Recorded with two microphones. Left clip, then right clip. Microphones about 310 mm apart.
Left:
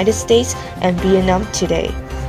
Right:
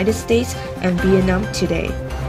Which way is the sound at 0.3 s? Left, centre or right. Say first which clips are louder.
Left 5 dB; left.